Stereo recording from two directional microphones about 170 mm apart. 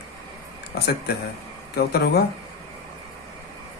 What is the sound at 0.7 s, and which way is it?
Speech, 70° left (ahead or behind).